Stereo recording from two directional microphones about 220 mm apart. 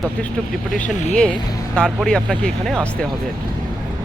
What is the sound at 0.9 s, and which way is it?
Speech, 30° left (ahead or behind).